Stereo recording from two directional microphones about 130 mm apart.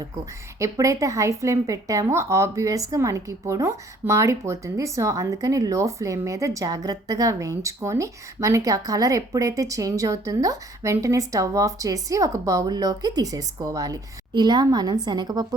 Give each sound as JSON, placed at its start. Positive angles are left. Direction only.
{"t": 0.6, "sound": "a woman's voice", "side_deg": -25}